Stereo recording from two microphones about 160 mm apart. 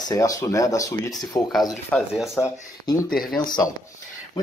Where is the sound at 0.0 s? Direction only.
20° left (ahead or behind).